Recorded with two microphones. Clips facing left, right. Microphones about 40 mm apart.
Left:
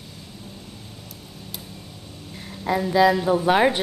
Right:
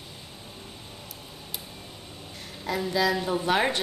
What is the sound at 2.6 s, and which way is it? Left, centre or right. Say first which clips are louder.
A woman's voice: left 7 dB; centre.